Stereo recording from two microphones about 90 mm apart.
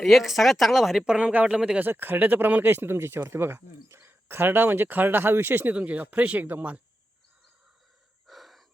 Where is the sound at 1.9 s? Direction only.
20° right (ahead or behind).